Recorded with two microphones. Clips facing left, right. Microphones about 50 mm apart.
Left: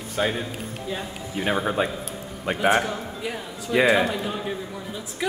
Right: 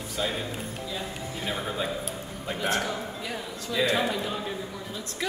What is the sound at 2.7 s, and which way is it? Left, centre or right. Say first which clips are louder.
A man's voice: left 6 dB; centre.